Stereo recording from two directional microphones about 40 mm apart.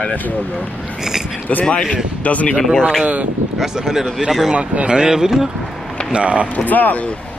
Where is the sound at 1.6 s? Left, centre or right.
Left.